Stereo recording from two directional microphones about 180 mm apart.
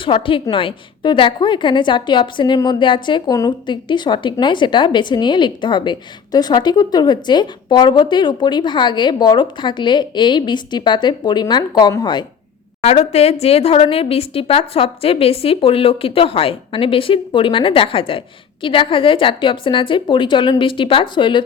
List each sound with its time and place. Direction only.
0.0 s a woman's voice: 30° left (ahead or behind)
12.8 s a woman's voice: 35° left (ahead or behind)